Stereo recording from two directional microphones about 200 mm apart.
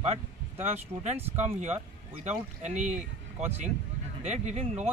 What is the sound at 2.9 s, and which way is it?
Speech, 5° right (ahead or behind).